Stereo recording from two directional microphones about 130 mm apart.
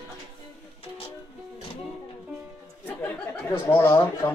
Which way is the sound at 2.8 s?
15° left (ahead or behind).